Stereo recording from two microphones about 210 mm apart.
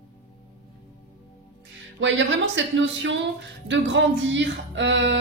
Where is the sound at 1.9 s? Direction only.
60° right (ahead or behind).